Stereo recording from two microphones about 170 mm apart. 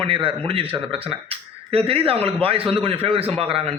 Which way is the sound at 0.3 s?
30° right (ahead or behind).